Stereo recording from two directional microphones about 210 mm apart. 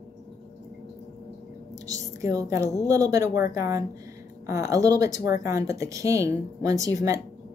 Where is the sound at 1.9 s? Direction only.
15° right (ahead or behind).